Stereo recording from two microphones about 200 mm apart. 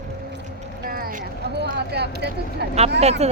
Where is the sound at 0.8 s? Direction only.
45° right (ahead or behind).